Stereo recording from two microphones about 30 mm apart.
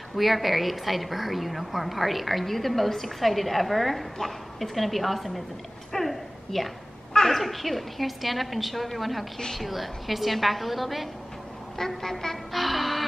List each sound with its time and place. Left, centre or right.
0.1 s a woman's voice: centre
5.9 s a sound: centre
7.2 s a woman's voice: centre
12.0 s music: centre
12.5 s music: centre